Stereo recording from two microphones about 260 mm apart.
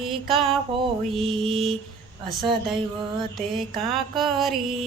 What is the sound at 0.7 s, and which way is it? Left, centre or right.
Mantra, right.